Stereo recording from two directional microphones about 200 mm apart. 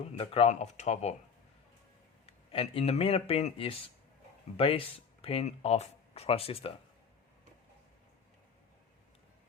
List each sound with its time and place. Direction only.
0.2 s speech: 30° left (ahead or behind)
2.5 s speech: 30° left (ahead or behind)